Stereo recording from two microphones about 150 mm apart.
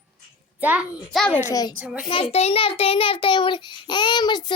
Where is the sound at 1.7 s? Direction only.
10° right (ahead or behind).